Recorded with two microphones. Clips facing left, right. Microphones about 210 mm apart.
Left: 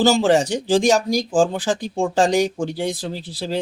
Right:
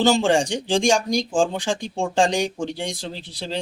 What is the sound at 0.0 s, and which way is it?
Speech, 5° left (ahead or behind).